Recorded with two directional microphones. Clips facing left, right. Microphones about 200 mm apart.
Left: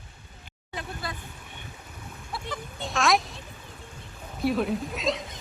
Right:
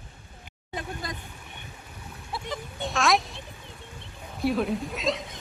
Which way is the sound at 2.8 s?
Centre (ahead or behind).